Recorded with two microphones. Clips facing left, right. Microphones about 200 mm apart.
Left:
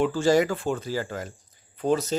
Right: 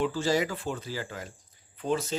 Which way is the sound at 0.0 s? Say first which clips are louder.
Left 6 dB; 50° left (ahead or behind).